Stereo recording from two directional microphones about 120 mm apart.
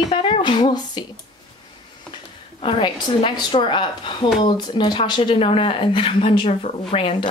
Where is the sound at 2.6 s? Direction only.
45° left (ahead or behind).